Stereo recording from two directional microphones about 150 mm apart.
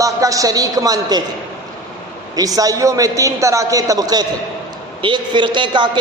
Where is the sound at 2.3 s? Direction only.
25° right (ahead or behind).